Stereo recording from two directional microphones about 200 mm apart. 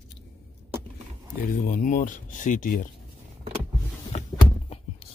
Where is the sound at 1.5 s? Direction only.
40° left (ahead or behind).